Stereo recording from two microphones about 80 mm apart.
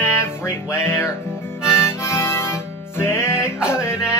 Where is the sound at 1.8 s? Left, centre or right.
Left.